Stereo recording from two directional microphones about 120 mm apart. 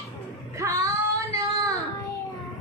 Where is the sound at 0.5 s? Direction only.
25° right (ahead or behind).